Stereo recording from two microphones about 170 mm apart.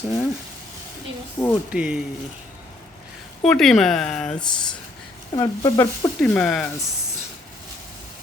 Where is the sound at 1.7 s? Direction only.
5° right (ahead or behind).